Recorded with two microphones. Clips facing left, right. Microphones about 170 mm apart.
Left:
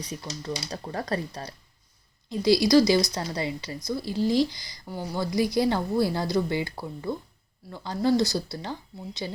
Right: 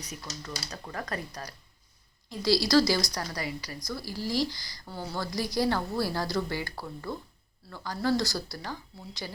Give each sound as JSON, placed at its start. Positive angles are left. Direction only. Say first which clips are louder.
{"t": 0.0, "sound": "a woman's voice", "louder": "left 6 dB", "side_deg": 30}